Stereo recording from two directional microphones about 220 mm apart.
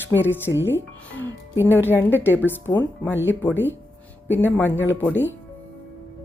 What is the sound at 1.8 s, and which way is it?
Speech, 10° left (ahead or behind).